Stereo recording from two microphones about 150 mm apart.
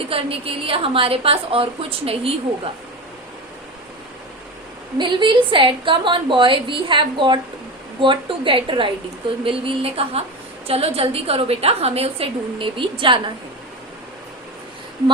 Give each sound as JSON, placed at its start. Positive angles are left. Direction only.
{"t": 0.0, "sound": "a woman's voice", "side_deg": -40}
{"t": 4.9, "sound": "a woman's voice", "side_deg": -30}